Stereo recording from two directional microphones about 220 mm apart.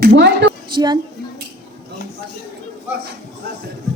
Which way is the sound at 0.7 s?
20° right (ahead or behind).